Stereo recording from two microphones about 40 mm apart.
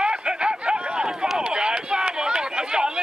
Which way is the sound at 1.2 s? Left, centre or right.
Centre.